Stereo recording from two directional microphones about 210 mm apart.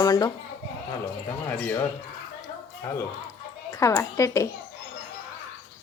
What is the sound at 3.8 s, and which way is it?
Speech, 15° left (ahead or behind).